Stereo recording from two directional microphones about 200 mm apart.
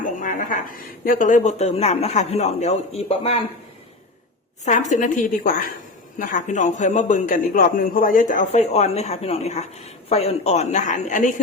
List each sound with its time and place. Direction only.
0.0 s a sound: 40° left (ahead or behind)
1.0 s a man's voice: 40° left (ahead or behind)
4.6 s a man's voice: 35° left (ahead or behind)